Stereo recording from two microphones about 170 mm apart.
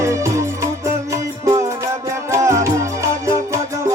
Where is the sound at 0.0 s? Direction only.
15° right (ahead or behind).